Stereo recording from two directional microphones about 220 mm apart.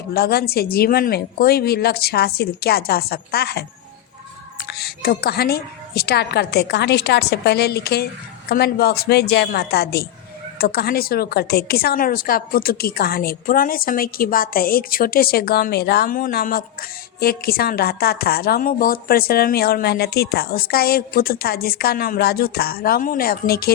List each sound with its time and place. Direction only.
0.1 s a woman's voice: 45° left (ahead or behind)
4.7 s a woman's voice: 45° left (ahead or behind)